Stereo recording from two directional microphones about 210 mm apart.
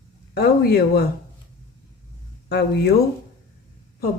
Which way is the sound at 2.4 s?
50° left (ahead or behind).